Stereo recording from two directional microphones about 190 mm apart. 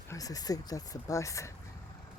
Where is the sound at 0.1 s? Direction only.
20° left (ahead or behind).